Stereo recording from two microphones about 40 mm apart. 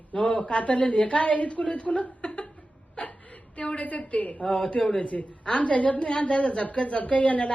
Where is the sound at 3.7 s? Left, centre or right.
Left.